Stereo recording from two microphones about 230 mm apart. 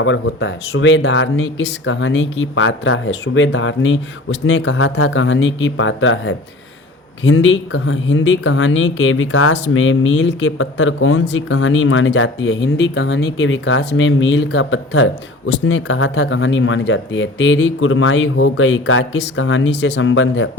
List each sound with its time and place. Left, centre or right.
0.0 s speech: left